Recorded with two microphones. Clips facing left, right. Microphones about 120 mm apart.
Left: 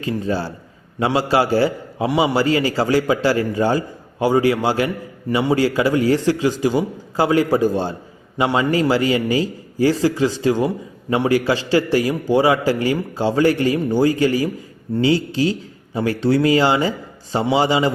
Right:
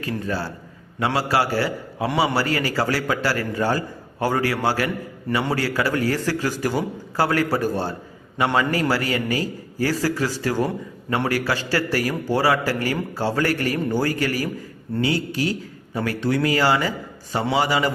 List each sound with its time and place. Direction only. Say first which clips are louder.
0.0 s a man's voice: left 4 dB; 20° left (ahead or behind)